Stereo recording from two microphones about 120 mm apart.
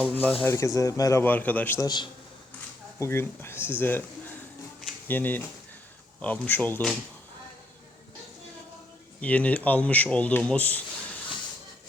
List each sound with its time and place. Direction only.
0.0 s speech: 15° left (ahead or behind)
1.2 s speech: 15° left (ahead or behind)
1.8 s a man's voice: 35° left (ahead or behind)
3.0 s speech: 20° left (ahead or behind)
5.0 s speech: 15° left (ahead or behind)
9.2 s speech: 10° left (ahead or behind)